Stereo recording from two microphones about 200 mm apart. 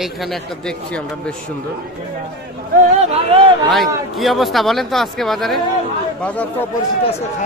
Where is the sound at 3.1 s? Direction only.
25° right (ahead or behind).